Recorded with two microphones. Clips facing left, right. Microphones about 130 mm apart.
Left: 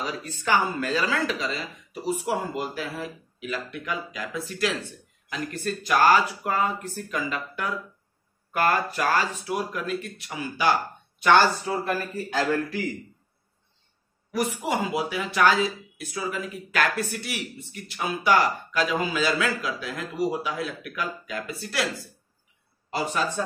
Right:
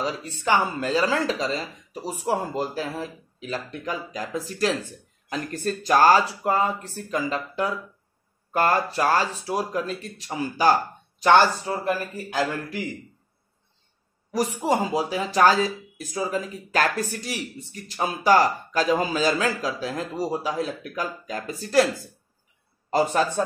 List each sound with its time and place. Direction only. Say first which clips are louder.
0.0 s speech: right 3 dB; 25° right (ahead or behind)
11.8 s a man's voice: right 1 dB; 15° right (ahead or behind)
14.3 s speech: right 3 dB; 35° right (ahead or behind)
22.8 s speech: right 5 dB; 40° right (ahead or behind)